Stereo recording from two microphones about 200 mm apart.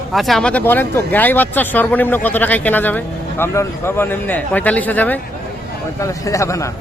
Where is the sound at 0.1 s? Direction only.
Centre (ahead or behind).